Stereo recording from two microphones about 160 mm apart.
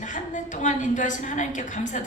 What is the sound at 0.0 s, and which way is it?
A woman's voice, 50° left (ahead or behind).